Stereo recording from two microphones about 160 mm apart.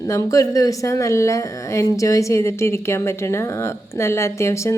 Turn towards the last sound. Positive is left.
turn(degrees=15)  # may be behind; listen again after turning